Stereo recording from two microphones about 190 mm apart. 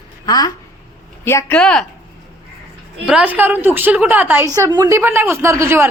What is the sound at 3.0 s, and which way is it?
A woman's voice, 5° right (ahead or behind).